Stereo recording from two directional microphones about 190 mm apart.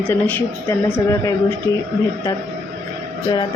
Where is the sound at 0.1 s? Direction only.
10° left (ahead or behind).